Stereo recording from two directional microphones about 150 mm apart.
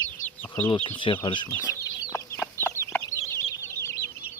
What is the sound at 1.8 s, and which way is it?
Chicken, 25° left (ahead or behind).